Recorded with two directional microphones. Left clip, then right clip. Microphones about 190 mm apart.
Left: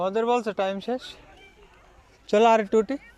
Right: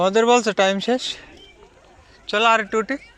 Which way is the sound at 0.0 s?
Centre (ahead or behind).